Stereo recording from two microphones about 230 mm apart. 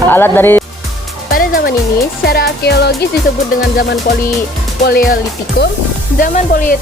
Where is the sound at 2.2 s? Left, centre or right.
Left.